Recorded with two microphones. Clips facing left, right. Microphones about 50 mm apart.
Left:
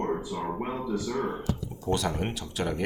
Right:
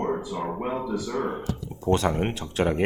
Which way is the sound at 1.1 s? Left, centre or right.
Right.